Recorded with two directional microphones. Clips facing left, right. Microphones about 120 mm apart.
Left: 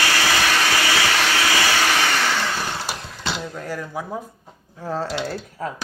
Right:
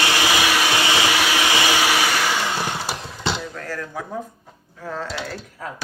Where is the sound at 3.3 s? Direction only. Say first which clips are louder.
Left 1 dB; 15° left (ahead or behind).